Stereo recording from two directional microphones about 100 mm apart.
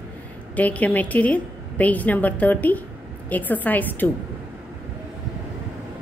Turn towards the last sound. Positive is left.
turn(degrees=20)  # may be behind; listen again after turning